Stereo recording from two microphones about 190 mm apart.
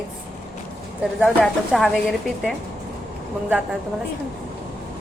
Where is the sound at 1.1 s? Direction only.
Centre (ahead or behind).